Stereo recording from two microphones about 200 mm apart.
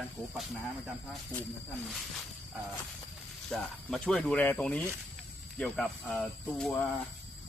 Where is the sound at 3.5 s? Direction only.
5° left (ahead or behind).